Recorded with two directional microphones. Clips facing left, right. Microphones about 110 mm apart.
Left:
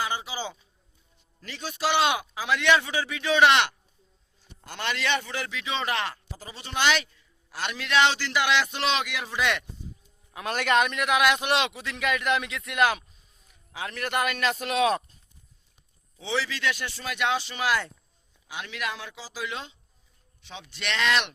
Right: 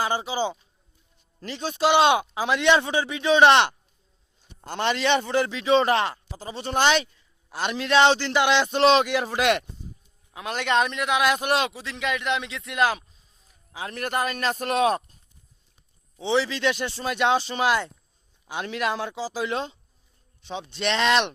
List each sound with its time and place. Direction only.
0.0 s a man's voice: 35° right (ahead or behind)
10.3 s a man's voice: 20° right (ahead or behind)
11.3 s a man's voice: 40° right (ahead or behind)
13.5 s a sound: 30° right (ahead or behind)
13.9 s speech: 40° right (ahead or behind)
16.1 s a man's voice: 25° right (ahead or behind)
18.4 s a man's voice: 35° right (ahead or behind)